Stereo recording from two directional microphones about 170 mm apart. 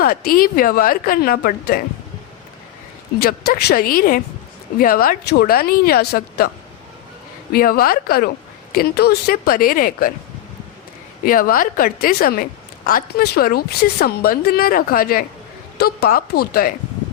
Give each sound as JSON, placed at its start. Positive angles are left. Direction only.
{"t": 0.0, "sound": "a woman's voice", "side_deg": 60}
{"t": 3.2, "sound": "a woman's voice", "side_deg": 60}
{"t": 7.5, "sound": "a woman's voice", "side_deg": 60}
{"t": 11.3, "sound": "a woman's voice", "side_deg": 55}